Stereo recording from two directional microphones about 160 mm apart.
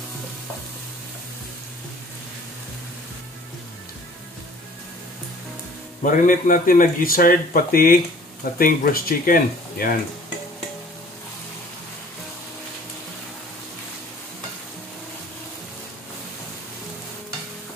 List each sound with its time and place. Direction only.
6.0 s speech: 55° left (ahead or behind)